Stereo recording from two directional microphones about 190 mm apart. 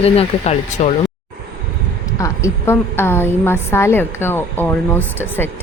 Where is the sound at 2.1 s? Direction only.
15° left (ahead or behind).